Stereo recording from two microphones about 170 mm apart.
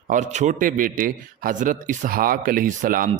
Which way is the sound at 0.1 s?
45° right (ahead or behind).